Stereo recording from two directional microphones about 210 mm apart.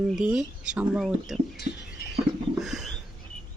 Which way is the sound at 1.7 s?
35° right (ahead or behind).